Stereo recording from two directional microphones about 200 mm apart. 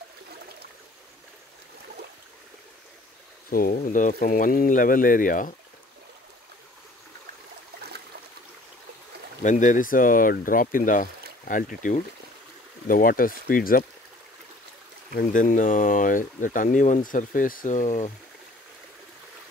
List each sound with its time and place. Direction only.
3.4 s speech: 45° left (ahead or behind)
9.4 s speech: 40° left (ahead or behind)
15.1 s speech: 40° left (ahead or behind)